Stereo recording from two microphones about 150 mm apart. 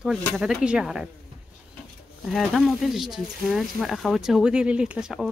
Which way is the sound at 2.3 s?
Centre (ahead or behind).